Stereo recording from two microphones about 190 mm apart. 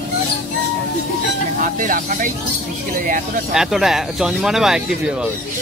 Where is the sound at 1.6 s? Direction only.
45° right (ahead or behind).